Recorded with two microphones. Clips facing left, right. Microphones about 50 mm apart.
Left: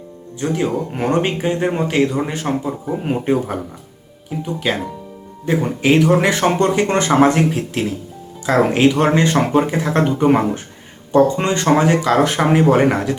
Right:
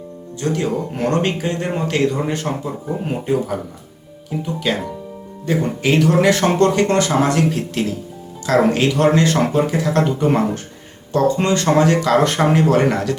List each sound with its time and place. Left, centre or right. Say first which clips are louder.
0.3 s speech: left 1 dB; centre
4.3 s speech: right 1 dB; centre
5.5 s speech: left 2 dB; centre
6.9 s speech: left 3 dB; left
7.5 s speech: even; centre
11.8 s speech: even; centre
12.6 s speech: left 2 dB; centre